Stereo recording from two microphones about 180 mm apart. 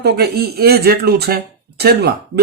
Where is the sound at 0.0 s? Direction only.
60° right (ahead or behind).